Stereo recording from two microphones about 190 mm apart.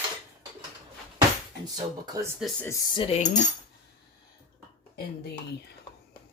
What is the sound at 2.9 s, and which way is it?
Cutlery, 25° left (ahead or behind).